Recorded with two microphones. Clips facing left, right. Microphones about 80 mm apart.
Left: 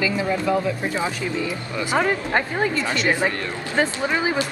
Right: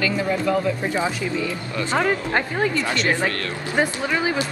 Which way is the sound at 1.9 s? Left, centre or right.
Centre.